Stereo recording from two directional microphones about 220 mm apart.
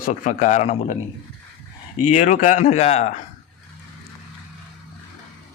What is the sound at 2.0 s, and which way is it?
Speech, 35° left (ahead or behind).